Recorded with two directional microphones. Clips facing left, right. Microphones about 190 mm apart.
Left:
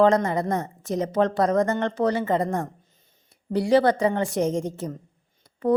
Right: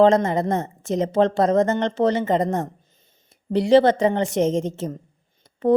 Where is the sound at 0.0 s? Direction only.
25° right (ahead or behind).